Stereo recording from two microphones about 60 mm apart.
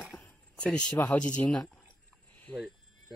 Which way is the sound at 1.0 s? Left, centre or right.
Left.